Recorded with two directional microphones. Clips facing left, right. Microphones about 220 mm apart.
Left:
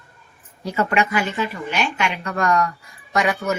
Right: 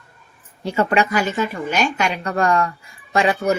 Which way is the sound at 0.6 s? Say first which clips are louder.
Right 2 dB; 30° right (ahead or behind).